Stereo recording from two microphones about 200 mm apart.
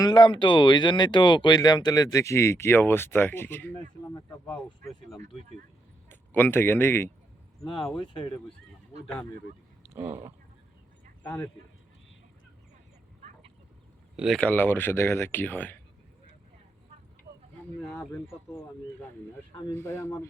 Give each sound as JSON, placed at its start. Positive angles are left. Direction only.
{"t": 0.0, "sound": "speech", "side_deg": 20}
{"t": 6.1, "sound": "a man's voice", "side_deg": 10}
{"t": 7.6, "sound": "speech", "side_deg": 25}
{"t": 9.8, "sound": "a sound", "side_deg": -10}
{"t": 14.2, "sound": "speech", "side_deg": 0}
{"t": 17.7, "sound": "speech", "side_deg": 5}
{"t": 19.7, "sound": "speech", "side_deg": 10}